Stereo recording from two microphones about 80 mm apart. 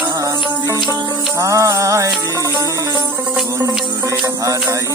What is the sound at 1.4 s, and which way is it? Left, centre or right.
Music, right.